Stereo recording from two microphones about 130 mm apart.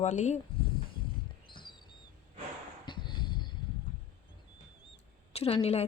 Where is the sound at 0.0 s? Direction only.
65° left (ahead or behind).